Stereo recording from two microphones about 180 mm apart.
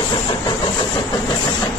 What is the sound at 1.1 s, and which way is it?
Vehicle, 20° left (ahead or behind).